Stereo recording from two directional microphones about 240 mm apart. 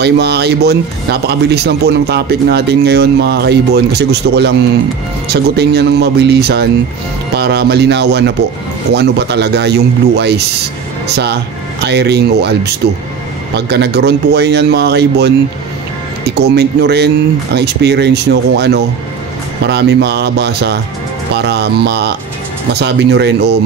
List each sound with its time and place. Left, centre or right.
0.0 s speech: right